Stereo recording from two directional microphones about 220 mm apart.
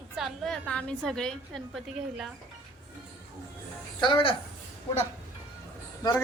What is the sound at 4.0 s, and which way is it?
Speech, 20° left (ahead or behind).